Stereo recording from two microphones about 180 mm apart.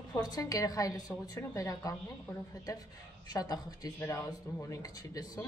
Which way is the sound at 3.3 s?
20° left (ahead or behind).